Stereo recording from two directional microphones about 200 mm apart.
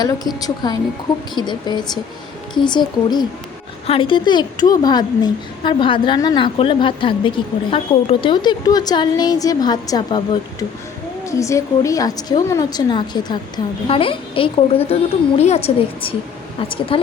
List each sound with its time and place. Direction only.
0.0 s a woman's voice: 20° left (ahead or behind)